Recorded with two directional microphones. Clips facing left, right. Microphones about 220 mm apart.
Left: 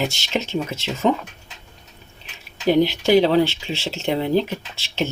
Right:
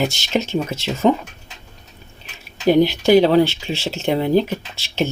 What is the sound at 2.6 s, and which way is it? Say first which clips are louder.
Speech: right 3 dB; 45° right (ahead or behind).